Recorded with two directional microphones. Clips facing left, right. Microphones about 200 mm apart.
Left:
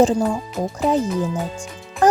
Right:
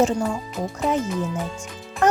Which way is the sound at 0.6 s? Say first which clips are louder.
Left 4 dB; 35° left (ahead or behind).